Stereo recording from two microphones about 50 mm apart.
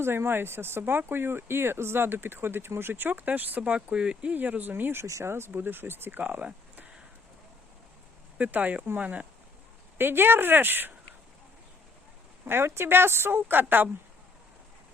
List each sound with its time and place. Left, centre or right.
0.0 s speech: right
3.8 s speech: centre
4.4 s speech: right
4.7 s speech: right
5.0 s speech: right
5.5 s speech: right
8.4 s speech: right
10.0 s speech: right
12.5 s speech: right